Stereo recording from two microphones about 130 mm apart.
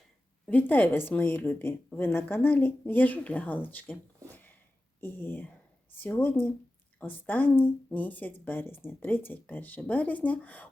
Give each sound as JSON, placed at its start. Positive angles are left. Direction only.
{"t": 0.4, "sound": "a woman's voice", "side_deg": 10}